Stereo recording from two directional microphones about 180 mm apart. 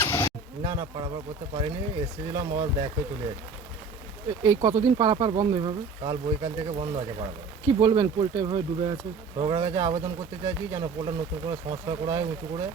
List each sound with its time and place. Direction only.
0.0 s a sound: 15° left (ahead or behind)
0.6 s speech: 20° right (ahead or behind)
4.4 s speech: 20° right (ahead or behind)